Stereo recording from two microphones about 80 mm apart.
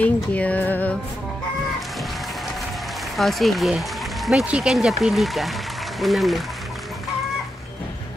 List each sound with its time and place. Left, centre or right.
0.0 s music: centre
3.2 s speech: centre